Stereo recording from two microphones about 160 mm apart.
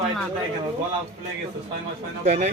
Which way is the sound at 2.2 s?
45° right (ahead or behind).